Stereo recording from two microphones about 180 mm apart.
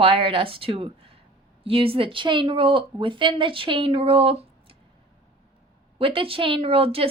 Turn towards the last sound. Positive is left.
turn(degrees=-30)  # may be behind; listen again after turning